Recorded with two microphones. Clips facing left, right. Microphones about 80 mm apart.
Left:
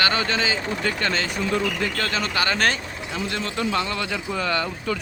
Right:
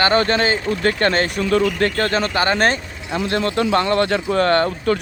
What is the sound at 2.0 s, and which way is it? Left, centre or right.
A man's voice, right.